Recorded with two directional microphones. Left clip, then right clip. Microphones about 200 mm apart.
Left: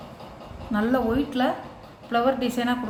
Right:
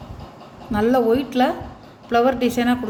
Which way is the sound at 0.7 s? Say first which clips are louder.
Right 6 dB; 40° right (ahead or behind).